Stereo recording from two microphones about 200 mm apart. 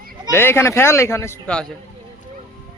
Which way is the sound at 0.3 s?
10° left (ahead or behind).